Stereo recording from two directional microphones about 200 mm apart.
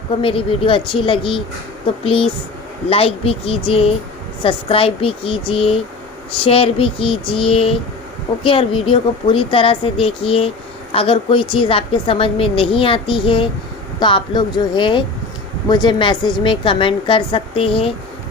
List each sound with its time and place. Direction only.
0.1 s a woman's voice: 25° left (ahead or behind)